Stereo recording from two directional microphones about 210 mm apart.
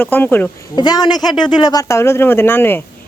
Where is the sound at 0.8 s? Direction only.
20° left (ahead or behind).